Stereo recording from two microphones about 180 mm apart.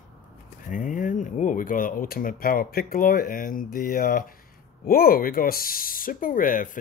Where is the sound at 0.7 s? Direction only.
50° left (ahead or behind).